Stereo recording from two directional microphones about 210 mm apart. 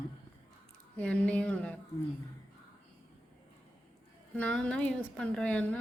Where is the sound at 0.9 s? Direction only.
5° left (ahead or behind).